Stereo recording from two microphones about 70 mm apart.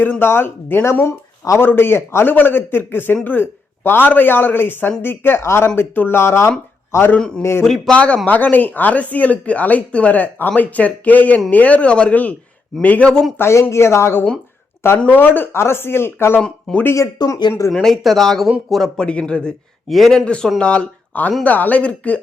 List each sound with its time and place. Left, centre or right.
0.0 s a man's voice: left
7.2 s speech: centre
7.9 s speech: centre
13.4 s a man's voice: left
15.1 s a man's voice: left
16.4 s speech: centre
16.8 s speech: left
17.2 s speech: left
17.8 s speech: centre
19.0 s speech: centre
20.2 s speech: centre